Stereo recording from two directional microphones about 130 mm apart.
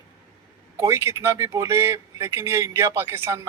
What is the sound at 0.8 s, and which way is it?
A man's voice, 20° right (ahead or behind).